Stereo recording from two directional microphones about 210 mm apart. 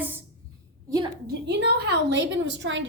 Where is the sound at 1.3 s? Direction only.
55° right (ahead or behind).